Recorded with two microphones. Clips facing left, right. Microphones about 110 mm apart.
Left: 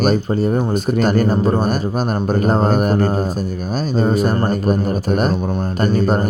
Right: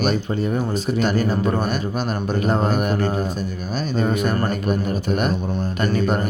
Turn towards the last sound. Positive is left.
turn(degrees=40)  # may be behind; listen again after turning